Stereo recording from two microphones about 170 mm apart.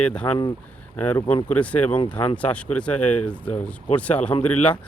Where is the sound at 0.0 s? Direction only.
5° left (ahead or behind).